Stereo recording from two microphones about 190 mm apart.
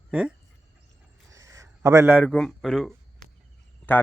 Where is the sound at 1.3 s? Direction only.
15° right (ahead or behind).